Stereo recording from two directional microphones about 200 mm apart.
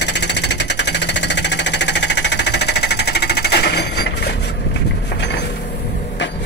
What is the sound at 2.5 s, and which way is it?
Sewing machine, 55° left (ahead or behind).